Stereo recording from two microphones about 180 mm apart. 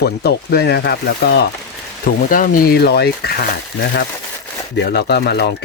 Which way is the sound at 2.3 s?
50° left (ahead or behind).